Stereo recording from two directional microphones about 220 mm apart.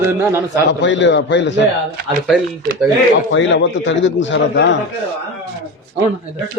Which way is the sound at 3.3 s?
55° left (ahead or behind).